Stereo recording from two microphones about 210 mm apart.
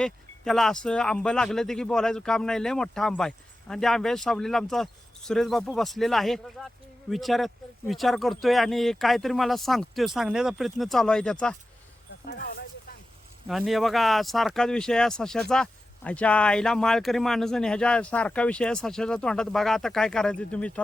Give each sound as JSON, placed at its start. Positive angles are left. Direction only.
{"t": 0.0, "sound": "speech", "side_deg": 0}
{"t": 12.2, "sound": "speech", "side_deg": 45}
{"t": 13.5, "sound": "speech", "side_deg": 0}